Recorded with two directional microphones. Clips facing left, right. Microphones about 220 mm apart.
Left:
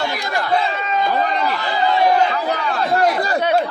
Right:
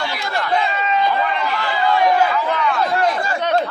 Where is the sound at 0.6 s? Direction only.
45° left (ahead or behind).